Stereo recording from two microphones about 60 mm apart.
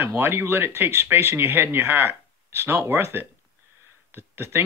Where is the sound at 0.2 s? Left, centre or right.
Right.